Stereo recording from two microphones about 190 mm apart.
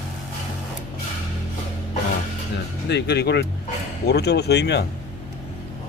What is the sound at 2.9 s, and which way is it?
Speech, 65° left (ahead or behind).